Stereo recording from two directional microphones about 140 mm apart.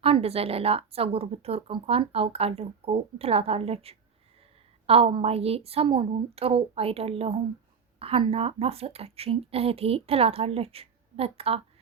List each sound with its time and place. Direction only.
0.0 s a woman's voice: 45° right (ahead or behind)